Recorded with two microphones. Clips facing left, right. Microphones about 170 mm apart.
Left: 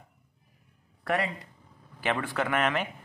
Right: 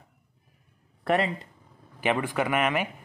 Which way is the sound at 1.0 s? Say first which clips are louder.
Right 4 dB; 25° right (ahead or behind).